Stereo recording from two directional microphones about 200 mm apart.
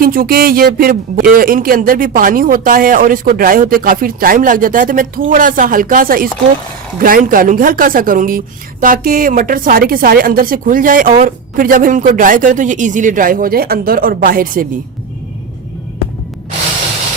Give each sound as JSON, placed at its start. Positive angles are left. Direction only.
{"t": 0.0, "sound": "a woman's voice", "side_deg": -45}